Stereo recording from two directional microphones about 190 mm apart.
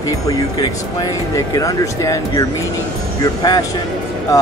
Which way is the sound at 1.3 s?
15° left (ahead or behind).